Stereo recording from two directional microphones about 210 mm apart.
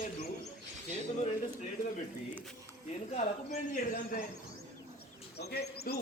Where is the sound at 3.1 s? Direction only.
35° left (ahead or behind).